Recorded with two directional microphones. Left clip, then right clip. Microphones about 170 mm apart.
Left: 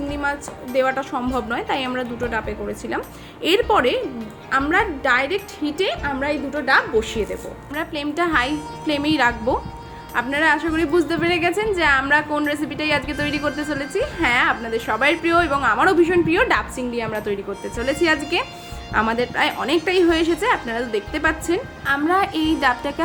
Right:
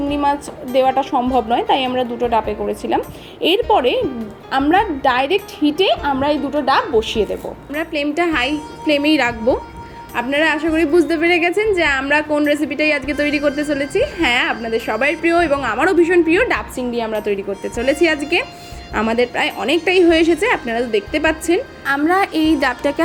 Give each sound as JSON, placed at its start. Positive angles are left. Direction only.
{"t": 0.1, "sound": "a woman's voice", "side_deg": -5}
{"t": 14.6, "sound": "a woman's voice", "side_deg": -5}
{"t": 17.6, "sound": "music", "side_deg": -20}
{"t": 18.0, "sound": "a woman's voice", "side_deg": -15}
{"t": 22.6, "sound": "music", "side_deg": -20}